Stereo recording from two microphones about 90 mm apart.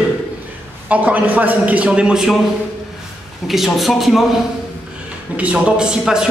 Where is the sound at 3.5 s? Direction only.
Centre (ahead or behind).